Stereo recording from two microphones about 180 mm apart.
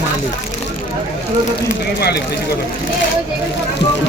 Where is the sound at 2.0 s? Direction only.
65° left (ahead or behind).